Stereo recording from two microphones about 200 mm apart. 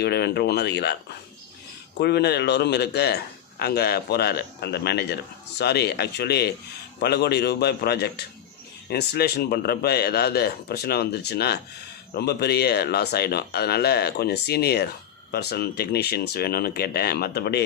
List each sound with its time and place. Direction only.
0.0 s a man's voice: 55° left (ahead or behind)
2.0 s a man's voice: 55° left (ahead or behind)